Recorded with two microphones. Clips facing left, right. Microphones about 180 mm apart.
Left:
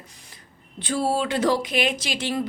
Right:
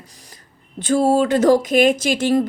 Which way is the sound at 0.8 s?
45° right (ahead or behind).